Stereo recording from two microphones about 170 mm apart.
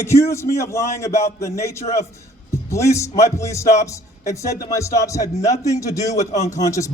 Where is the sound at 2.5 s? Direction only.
15° left (ahead or behind).